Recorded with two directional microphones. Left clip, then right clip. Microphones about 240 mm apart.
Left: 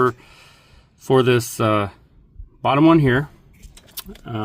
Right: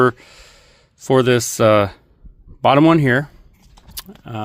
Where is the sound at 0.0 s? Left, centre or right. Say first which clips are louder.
Right 3 dB; right.